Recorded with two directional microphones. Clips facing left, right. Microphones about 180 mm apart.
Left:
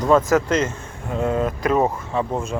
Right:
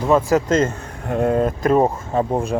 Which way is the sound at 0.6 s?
55° right (ahead or behind).